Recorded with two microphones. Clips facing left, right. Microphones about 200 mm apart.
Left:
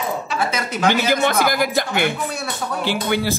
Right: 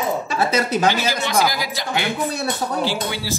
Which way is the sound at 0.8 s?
55° left (ahead or behind).